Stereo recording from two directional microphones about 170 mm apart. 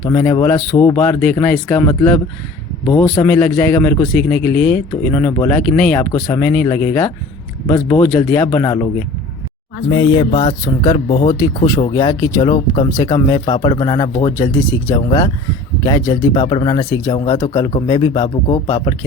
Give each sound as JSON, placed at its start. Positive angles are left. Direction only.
{"t": 0.0, "sound": "a man's voice", "side_deg": 15}
{"t": 0.5, "sound": "speech", "side_deg": 25}
{"t": 0.9, "sound": "a man's voice", "side_deg": 5}
{"t": 9.9, "sound": "speech", "side_deg": 25}
{"t": 11.3, "sound": "speech", "side_deg": 20}